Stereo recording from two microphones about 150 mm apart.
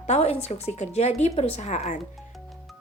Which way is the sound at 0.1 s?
45° left (ahead or behind).